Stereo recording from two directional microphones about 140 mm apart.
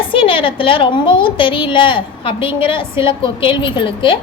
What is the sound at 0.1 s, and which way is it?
A woman's voice, 40° left (ahead or behind).